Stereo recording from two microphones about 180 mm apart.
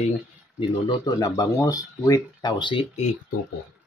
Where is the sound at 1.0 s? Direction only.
20° left (ahead or behind).